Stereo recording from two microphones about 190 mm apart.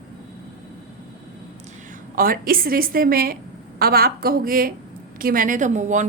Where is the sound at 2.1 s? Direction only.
50° right (ahead or behind).